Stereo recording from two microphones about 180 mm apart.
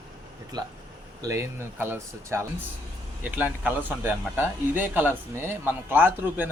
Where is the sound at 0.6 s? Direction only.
25° right (ahead or behind).